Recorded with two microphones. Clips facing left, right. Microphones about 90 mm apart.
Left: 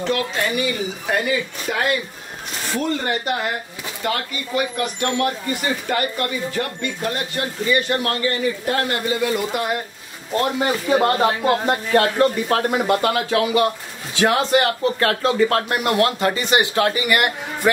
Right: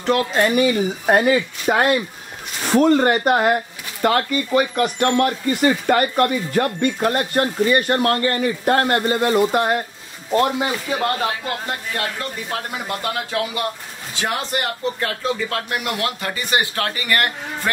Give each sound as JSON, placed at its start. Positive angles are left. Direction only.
{"t": 0.0, "sound": "speech", "side_deg": -40}
{"t": 10.9, "sound": "speech", "side_deg": 30}
{"t": 11.9, "sound": "speech", "side_deg": 50}
{"t": 12.7, "sound": "speech", "side_deg": 85}
{"t": 15.3, "sound": "speech", "side_deg": 45}